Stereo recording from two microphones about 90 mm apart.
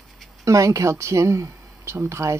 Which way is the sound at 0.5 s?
35° right (ahead or behind).